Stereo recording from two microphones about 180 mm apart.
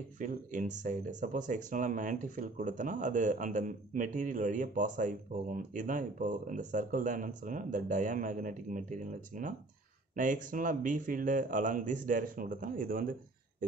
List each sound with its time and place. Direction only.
0.2 s speech: 45° right (ahead or behind)